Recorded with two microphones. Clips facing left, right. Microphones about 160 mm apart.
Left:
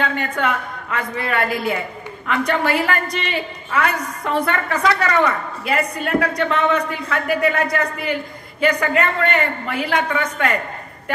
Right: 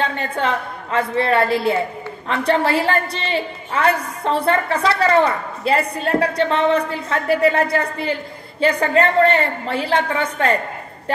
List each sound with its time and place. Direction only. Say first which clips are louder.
0.0 s a woman's voice: even; 30° right (ahead or behind)